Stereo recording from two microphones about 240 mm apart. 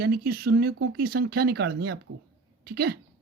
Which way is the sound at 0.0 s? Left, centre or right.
Right.